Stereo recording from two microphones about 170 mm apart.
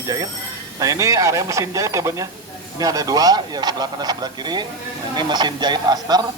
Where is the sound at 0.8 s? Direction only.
20° right (ahead or behind).